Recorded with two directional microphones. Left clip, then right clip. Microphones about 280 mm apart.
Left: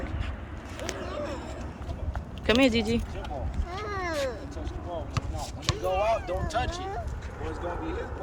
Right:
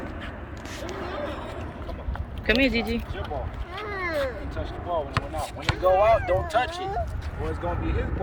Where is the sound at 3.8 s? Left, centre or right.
Left.